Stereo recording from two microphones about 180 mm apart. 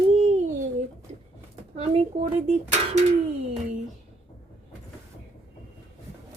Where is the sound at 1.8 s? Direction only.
35° right (ahead or behind).